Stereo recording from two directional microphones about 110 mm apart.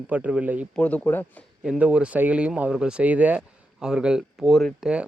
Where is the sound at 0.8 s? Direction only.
15° left (ahead or behind).